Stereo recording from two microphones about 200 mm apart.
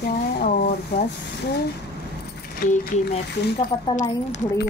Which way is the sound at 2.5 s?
50° left (ahead or behind).